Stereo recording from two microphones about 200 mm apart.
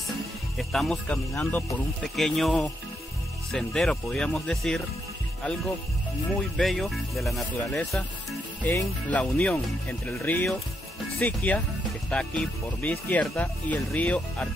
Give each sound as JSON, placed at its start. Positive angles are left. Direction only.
{"t": 0.6, "sound": "speech", "side_deg": 0}
{"t": 6.5, "sound": "speech", "side_deg": 0}